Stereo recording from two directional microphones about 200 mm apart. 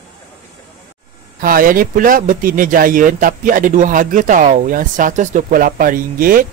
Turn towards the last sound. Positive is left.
turn(degrees=-45)  # may be behind; listen again after turning